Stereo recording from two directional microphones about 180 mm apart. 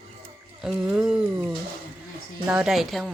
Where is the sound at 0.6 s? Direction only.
5° right (ahead or behind).